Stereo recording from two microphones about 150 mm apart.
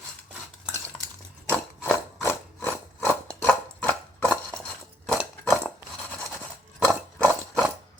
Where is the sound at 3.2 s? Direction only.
10° left (ahead or behind).